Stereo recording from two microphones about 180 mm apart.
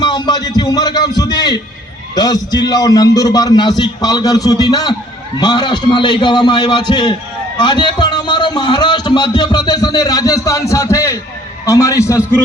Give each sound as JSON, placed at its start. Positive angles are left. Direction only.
{"t": 0.0, "sound": "a man's voice", "side_deg": 25}